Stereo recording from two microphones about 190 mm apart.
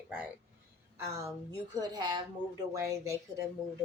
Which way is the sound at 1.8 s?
20° right (ahead or behind).